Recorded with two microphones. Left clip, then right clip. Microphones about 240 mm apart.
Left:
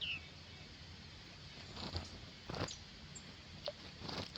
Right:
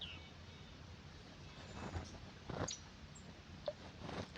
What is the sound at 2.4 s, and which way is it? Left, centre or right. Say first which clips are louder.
Vehicle: left 1 dB; left.